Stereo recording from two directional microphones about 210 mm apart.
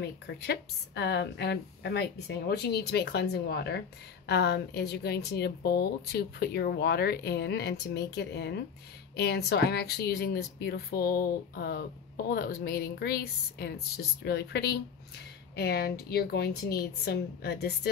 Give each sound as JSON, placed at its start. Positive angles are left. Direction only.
{"t": 0.0, "sound": "a woman's voice", "side_deg": 50}